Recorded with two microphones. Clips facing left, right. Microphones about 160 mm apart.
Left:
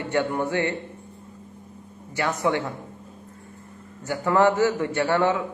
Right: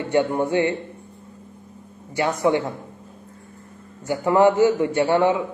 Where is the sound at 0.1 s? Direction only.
20° right (ahead or behind).